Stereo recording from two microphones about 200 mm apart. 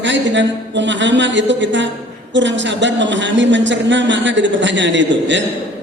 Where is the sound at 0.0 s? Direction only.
65° right (ahead or behind).